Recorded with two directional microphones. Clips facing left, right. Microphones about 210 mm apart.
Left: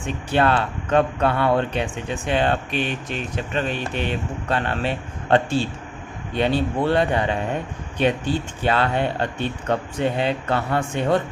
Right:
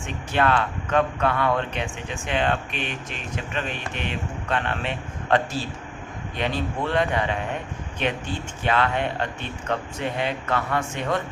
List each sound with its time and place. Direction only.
0.0 s speech: 35° left (ahead or behind)